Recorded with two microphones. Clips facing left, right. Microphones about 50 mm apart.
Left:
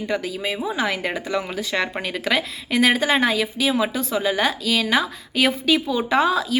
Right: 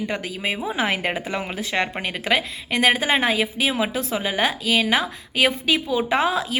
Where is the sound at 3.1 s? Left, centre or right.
Centre.